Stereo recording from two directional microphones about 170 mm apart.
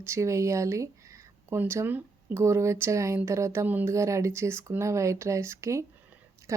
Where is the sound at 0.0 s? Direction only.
15° right (ahead or behind).